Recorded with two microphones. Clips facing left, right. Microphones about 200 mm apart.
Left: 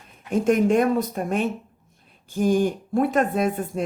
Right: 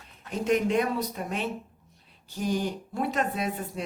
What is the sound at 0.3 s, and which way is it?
Speech, 50° left (ahead or behind).